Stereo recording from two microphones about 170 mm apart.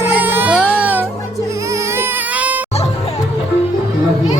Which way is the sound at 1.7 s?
15° right (ahead or behind).